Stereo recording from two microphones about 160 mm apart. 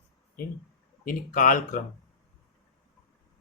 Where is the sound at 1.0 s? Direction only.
60° left (ahead or behind).